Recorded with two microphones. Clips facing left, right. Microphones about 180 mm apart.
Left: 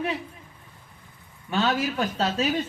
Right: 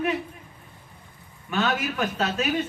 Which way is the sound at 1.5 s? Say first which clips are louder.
Left 1 dB; 30° left (ahead or behind).